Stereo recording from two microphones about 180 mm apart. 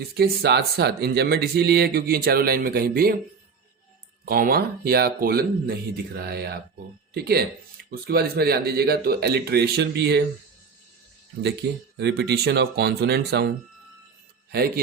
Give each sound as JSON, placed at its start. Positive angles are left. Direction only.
{"t": 0.2, "sound": "speech", "side_deg": -65}
{"t": 4.3, "sound": "speech", "side_deg": -55}
{"t": 11.6, "sound": "speech", "side_deg": -65}